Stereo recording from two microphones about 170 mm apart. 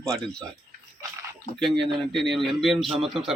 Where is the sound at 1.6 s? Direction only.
Centre (ahead or behind).